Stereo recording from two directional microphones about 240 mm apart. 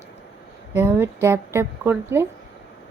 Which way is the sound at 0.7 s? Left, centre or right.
Centre.